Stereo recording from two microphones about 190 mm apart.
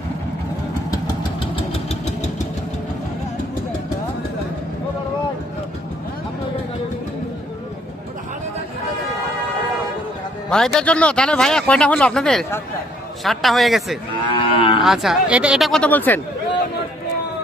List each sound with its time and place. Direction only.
1.5 s vehicle: 30° left (ahead or behind)
10.5 s speech: 5° left (ahead or behind)
14.3 s cattle: 25° left (ahead or behind)
14.8 s speech: centre (ahead or behind)